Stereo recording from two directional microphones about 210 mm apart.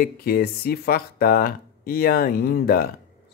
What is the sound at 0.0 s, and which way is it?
Speech, 45° left (ahead or behind).